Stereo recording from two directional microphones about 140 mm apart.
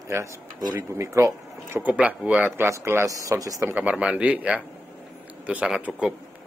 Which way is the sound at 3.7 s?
10° right (ahead or behind).